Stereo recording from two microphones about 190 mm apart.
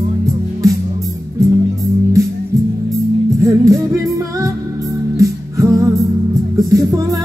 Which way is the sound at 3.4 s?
15° right (ahead or behind).